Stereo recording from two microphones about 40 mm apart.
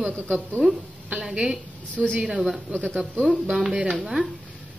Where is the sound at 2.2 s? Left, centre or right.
Centre.